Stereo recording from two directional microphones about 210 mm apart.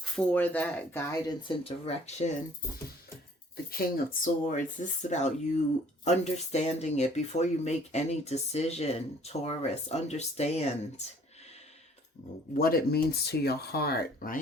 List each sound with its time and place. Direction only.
0.0 s speech: 5° left (ahead or behind); by 2.3 s 30° left (ahead or behind)
3.7 s speech: 40° left (ahead or behind)
12.5 s speech: 45° left (ahead or behind)